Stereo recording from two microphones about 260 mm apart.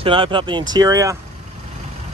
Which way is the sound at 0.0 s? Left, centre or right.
Centre.